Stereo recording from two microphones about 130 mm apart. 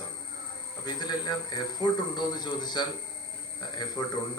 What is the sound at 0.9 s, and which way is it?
Speech, 35° left (ahead or behind).